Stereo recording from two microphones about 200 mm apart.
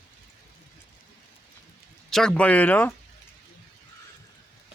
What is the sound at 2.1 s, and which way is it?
Speech, centre (ahead or behind).